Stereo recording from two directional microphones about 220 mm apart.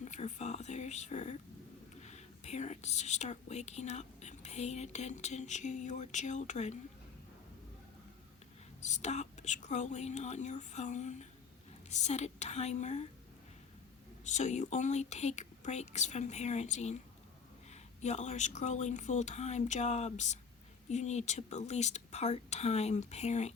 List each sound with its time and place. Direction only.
0.0 s speech: 30° left (ahead or behind)
8.8 s speech: 30° left (ahead or behind)
14.3 s speech: 30° left (ahead or behind)